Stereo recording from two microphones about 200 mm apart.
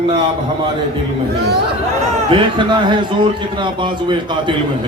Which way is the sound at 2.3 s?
25° right (ahead or behind).